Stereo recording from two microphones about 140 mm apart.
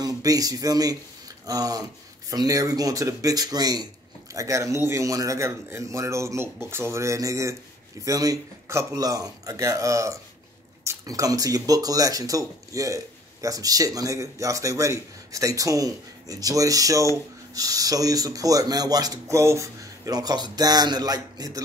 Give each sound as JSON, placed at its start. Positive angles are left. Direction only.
{"t": 0.0, "sound": "speech", "side_deg": -25}